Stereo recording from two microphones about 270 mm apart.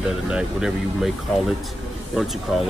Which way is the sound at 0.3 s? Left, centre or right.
Centre.